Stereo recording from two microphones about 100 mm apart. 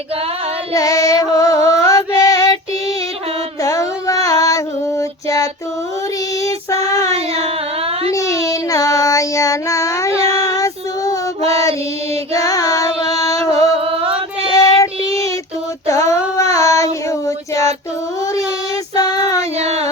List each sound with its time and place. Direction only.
0.7 s music: 35° left (ahead or behind)
3.6 s child singing: 35° left (ahead or behind)
7.3 s a sound: 85° right
8.1 s child singing: 35° left (ahead or behind)
10.1 s child singing: 80° right
10.3 s female singing: 35° left (ahead or behind)
14.5 s child singing: 35° left (ahead or behind)
15.9 s child singing: 30° left (ahead or behind)
18.9 s child singing: 40° left (ahead or behind)
19.4 s a sound: 90° right